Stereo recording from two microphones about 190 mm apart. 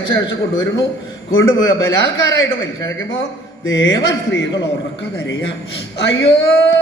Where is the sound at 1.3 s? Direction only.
85° left.